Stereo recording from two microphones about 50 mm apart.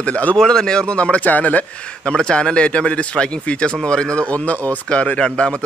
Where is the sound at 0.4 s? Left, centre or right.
Centre; by 1.6 s left.